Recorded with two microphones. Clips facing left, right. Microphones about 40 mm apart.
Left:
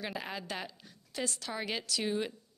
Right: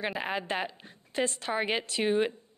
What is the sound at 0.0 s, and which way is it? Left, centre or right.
A woman's voice, right.